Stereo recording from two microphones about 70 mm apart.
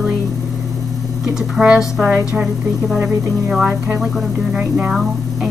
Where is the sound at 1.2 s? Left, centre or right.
Centre.